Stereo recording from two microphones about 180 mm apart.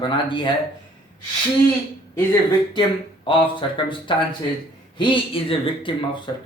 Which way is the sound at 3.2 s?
30° left (ahead or behind).